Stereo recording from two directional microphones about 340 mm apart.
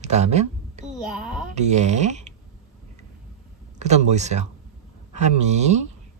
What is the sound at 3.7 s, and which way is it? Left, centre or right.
Speech, centre.